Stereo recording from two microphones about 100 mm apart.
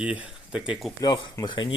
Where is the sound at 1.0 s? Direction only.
50° left (ahead or behind).